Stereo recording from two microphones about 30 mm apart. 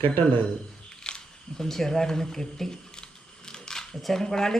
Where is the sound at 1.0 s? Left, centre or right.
Left.